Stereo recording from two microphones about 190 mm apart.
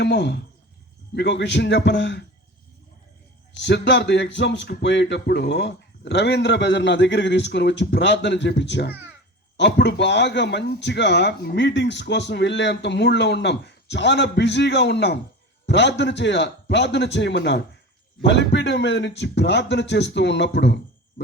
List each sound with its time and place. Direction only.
0.0 s a man's voice: 65° left (ahead or behind)
3.6 s a man's voice: 65° left (ahead or behind)